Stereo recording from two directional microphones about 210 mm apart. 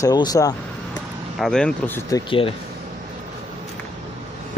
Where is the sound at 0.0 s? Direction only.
15° left (ahead or behind).